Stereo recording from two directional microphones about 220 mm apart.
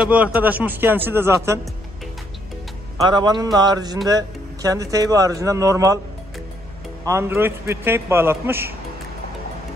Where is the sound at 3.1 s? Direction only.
20° right (ahead or behind).